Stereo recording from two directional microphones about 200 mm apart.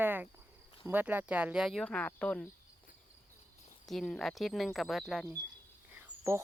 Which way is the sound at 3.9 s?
Centre (ahead or behind).